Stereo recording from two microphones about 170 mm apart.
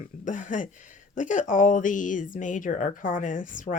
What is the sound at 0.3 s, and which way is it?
A woman's voice, 50° left (ahead or behind).